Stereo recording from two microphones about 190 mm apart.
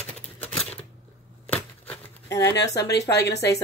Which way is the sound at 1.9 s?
15° left (ahead or behind).